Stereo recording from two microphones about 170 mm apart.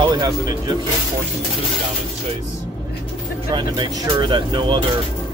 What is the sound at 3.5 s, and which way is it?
Speech, 25° right (ahead or behind).